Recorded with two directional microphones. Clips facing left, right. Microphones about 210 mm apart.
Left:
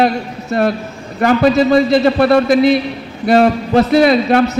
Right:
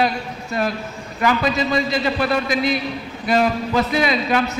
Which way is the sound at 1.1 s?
50° left (ahead or behind).